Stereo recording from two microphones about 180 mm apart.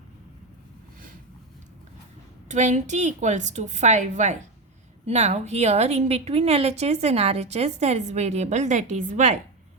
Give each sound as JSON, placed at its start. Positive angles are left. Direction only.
{"t": 2.5, "sound": "a woman's voice", "side_deg": -40}